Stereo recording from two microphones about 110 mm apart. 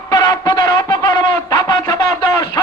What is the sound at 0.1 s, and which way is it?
Music, 35° left (ahead or behind).